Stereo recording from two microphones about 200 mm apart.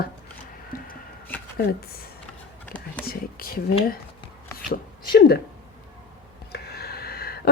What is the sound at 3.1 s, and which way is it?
Speech, 45° left (ahead or behind).